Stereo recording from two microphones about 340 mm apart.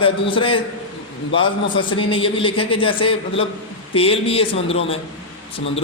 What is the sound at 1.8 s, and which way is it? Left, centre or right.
A man's voice, centre.